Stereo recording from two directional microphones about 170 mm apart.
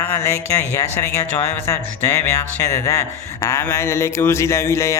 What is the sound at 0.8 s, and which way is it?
Speech, 15° left (ahead or behind).